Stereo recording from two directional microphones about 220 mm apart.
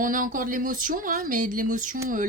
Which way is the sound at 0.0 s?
40° right (ahead or behind).